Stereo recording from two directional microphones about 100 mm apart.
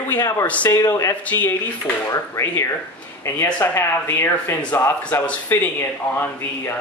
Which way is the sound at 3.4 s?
15° left (ahead or behind).